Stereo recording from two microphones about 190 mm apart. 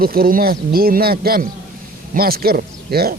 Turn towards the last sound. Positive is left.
turn(degrees=-50)  # may be behind; listen again after turning